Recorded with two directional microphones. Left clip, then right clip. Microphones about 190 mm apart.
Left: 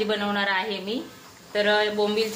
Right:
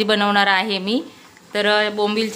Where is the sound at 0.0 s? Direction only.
70° right (ahead or behind).